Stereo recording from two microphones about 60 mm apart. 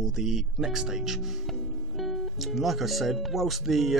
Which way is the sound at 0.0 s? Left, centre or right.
Centre.